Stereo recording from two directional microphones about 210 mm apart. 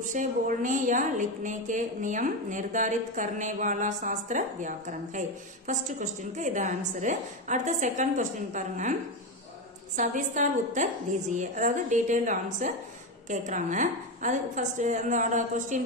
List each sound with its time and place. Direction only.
0.0 s a woman's voice: 35° right (ahead or behind)
9.9 s a woman's voice: 35° right (ahead or behind)